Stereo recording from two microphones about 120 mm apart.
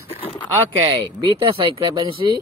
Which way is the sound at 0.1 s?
50° left (ahead or behind).